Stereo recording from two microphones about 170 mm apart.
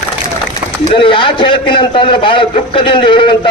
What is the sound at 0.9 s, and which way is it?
A man's voice, 30° left (ahead or behind).